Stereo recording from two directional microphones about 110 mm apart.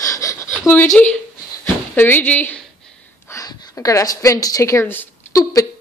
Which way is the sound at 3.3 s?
25° left (ahead or behind).